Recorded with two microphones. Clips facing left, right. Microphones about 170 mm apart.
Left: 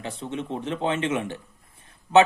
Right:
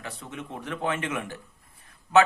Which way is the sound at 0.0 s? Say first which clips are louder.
Left 7 dB; 25° left (ahead or behind).